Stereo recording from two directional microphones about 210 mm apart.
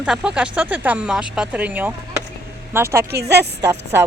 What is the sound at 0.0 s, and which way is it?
Speech, 5° right (ahead or behind).